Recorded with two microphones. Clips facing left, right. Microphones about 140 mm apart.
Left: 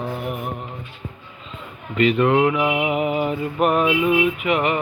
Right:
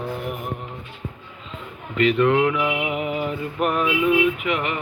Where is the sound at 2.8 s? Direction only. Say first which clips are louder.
Left 4 dB; 15° left (ahead or behind).